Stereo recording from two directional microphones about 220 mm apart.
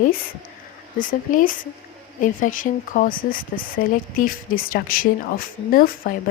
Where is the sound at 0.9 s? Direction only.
40° left (ahead or behind).